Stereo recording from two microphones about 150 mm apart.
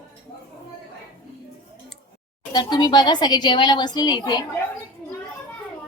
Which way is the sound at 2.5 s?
30° left (ahead or behind).